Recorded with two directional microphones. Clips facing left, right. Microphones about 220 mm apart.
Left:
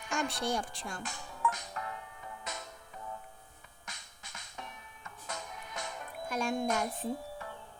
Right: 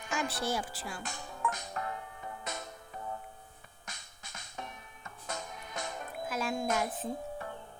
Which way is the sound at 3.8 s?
45° right (ahead or behind).